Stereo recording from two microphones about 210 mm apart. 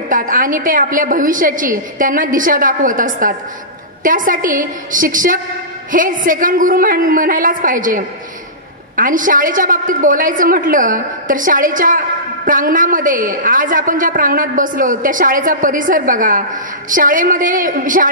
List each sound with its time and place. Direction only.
0.1 s a woman's voice: 40° right (ahead or behind)